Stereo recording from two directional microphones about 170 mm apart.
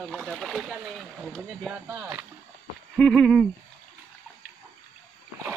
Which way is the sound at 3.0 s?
5° left (ahead or behind).